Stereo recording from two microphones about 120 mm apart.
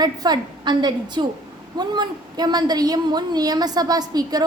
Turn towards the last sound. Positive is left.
turn(degrees=-35)  # may be behind; listen again after turning